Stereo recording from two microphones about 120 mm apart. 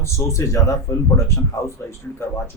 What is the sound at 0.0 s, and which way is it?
Speech, 25° left (ahead or behind).